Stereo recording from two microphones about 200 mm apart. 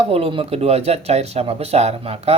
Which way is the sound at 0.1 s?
30° right (ahead or behind).